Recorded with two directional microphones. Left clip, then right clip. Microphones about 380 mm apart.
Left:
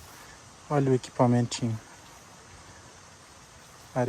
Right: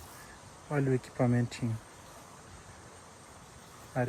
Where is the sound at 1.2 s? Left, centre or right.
Centre.